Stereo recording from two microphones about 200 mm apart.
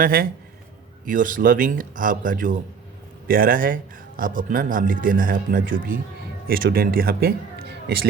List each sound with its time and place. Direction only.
0.0 s a man's voice: 45° right (ahead or behind)